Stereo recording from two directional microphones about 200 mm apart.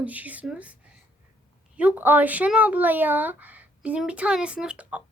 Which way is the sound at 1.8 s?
10° right (ahead or behind).